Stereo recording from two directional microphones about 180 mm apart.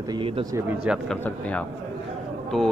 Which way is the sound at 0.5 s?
10° right (ahead or behind).